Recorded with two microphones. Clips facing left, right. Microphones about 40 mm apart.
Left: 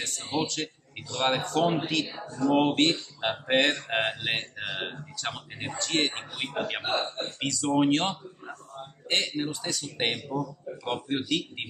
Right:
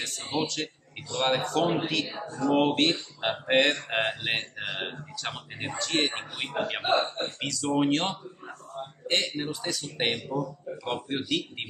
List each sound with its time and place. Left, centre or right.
0.0 s a man's voice: centre
2.0 s speech: right
2.5 s a man's voice: centre
6.8 s speech: centre
7.3 s a man's voice: centre